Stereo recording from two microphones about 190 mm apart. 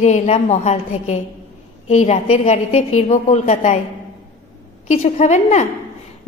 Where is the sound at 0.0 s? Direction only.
35° left (ahead or behind).